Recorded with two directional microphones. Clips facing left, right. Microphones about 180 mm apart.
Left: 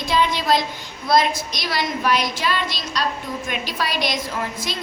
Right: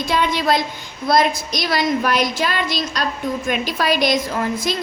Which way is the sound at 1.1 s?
50° right (ahead or behind).